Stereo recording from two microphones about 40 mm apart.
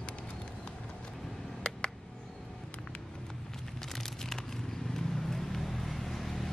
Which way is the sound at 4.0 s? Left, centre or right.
Centre.